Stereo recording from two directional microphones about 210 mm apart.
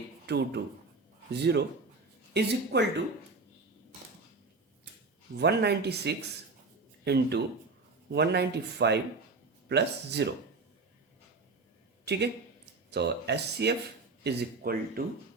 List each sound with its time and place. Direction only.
0.3 s speech: 50° right (ahead or behind)
5.4 s speech: 50° right (ahead or behind)
12.1 s speech: 50° right (ahead or behind)